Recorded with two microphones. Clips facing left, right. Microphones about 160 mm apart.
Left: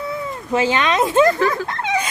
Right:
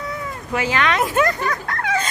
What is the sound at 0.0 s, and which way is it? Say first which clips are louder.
Speech: left 3 dB; 25° left (ahead or behind).